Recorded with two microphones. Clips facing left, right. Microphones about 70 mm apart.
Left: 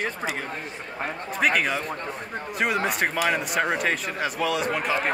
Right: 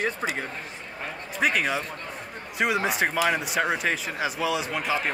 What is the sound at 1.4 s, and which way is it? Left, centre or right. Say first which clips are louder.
Speech: left 1 dB; centre.